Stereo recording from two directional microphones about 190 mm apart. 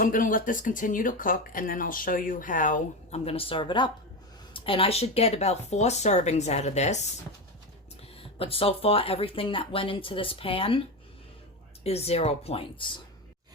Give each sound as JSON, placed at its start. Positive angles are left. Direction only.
{"t": 0.0, "sound": "speech", "side_deg": 45}
{"t": 8.2, "sound": "speech", "side_deg": 30}